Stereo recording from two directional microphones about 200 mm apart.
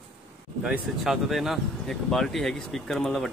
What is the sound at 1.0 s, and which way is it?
Speech, centre (ahead or behind).